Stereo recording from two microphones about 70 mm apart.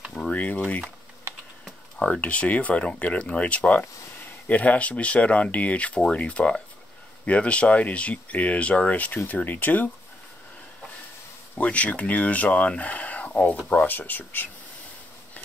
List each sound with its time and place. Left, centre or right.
0.2 s speech: left
1.3 s typing: right
2.0 s speech: centre
11.6 s speech: centre